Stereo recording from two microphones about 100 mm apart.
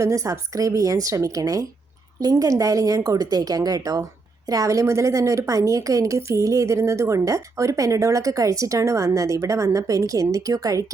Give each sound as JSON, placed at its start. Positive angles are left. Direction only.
{"t": 0.0, "sound": "a woman's voice", "side_deg": -35}